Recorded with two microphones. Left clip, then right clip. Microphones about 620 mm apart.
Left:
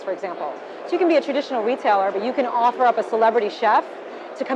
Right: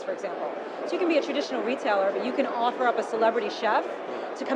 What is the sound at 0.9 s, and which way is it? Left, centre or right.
A woman's voice, left.